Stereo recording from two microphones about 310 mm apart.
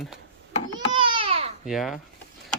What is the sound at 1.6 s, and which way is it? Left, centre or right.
Speech, centre.